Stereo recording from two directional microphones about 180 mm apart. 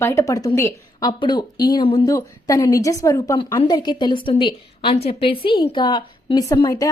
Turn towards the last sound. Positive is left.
turn(degrees=20)  # may be behind; listen again after turning